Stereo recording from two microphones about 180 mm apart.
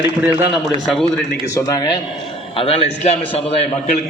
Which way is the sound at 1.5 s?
20° left (ahead or behind).